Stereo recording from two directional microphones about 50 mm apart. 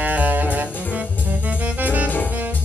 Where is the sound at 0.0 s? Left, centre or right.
Right.